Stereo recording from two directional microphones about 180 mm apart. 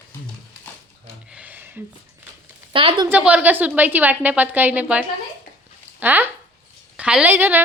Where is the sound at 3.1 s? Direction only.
5° right (ahead or behind).